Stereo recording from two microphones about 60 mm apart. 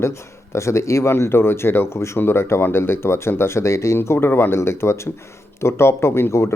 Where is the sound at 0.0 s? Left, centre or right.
Left.